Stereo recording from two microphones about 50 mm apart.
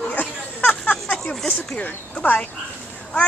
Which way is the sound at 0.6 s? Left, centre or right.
Left.